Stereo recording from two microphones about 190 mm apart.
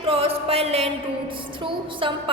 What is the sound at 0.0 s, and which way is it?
Music, 30° right (ahead or behind).